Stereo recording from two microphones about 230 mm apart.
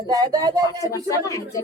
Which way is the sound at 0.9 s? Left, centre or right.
Centre.